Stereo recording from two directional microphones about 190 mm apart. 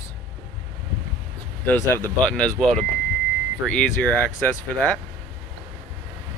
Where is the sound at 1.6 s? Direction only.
5° left (ahead or behind).